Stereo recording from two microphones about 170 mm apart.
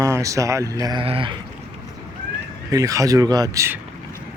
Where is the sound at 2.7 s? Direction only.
20° right (ahead or behind).